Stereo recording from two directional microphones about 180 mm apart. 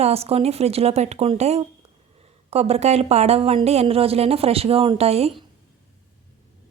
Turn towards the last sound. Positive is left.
turn(degrees=-35)  # may be behind; listen again after turning